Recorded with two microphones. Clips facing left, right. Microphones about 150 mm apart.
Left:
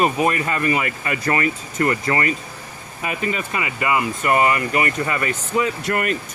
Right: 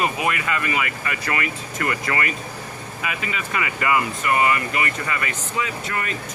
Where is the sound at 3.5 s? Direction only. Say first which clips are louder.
Right 3 dB; 20° left (ahead or behind).